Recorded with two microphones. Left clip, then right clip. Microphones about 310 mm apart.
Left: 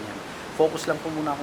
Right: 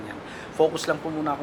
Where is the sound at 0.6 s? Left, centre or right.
Left.